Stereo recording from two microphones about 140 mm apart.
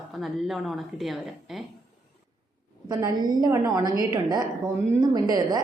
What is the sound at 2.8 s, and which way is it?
A woman's voice, 30° right (ahead or behind).